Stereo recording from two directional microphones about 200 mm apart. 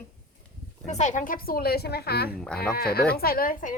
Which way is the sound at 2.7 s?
50° left (ahead or behind).